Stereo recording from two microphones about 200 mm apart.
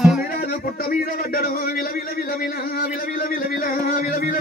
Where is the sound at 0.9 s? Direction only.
45° left (ahead or behind).